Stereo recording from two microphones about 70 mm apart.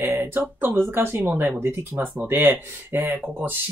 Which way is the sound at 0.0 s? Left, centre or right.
Right.